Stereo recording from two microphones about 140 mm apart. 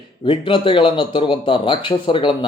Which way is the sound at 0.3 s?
35° left (ahead or behind).